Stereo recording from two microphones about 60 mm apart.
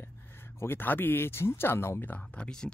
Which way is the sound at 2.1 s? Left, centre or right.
Centre.